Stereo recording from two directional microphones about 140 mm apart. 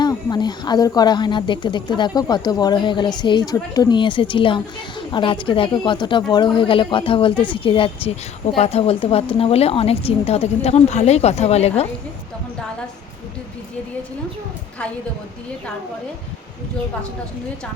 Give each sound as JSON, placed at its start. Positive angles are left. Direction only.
{"t": 0.0, "sound": "a woman's voice", "side_deg": 30}